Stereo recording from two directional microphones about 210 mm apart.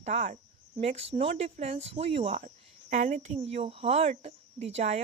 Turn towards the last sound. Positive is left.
turn(degrees=-30)  # may be behind; listen again after turning